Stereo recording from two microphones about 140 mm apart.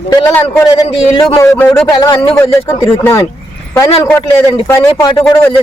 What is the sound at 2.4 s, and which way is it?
Speech, 20° left (ahead or behind).